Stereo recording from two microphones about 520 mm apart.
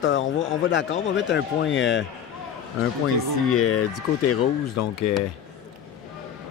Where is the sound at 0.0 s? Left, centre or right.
Left.